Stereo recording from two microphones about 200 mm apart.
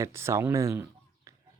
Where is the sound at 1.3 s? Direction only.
15° right (ahead or behind).